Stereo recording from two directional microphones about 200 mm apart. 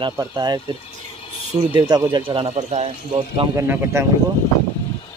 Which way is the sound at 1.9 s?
20° right (ahead or behind).